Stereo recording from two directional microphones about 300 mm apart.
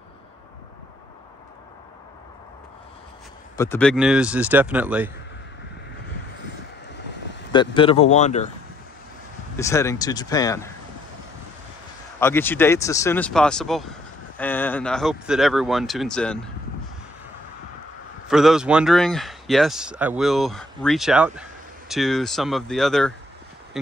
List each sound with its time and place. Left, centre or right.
3.5 s speech: centre
7.5 s speech: centre
9.6 s speech: centre
12.2 s speech: centre
18.3 s speech: centre